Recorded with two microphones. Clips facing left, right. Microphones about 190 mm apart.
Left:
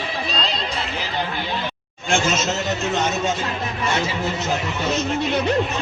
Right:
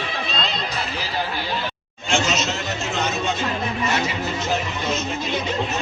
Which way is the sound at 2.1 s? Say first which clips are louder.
Left 1 dB; 50° left (ahead or behind).